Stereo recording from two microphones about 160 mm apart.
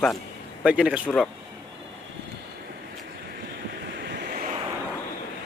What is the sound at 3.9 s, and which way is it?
Waves, 90° right.